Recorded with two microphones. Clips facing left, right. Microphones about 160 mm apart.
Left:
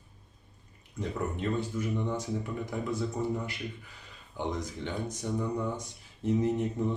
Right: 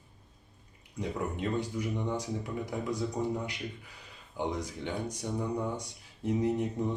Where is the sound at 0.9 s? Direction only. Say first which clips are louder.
Left 1 dB; 15° right (ahead or behind).